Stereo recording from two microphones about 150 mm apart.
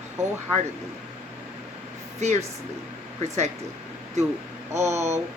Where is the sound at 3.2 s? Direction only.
50° right (ahead or behind).